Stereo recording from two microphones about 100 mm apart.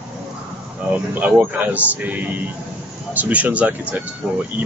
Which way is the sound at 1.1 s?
15° right (ahead or behind).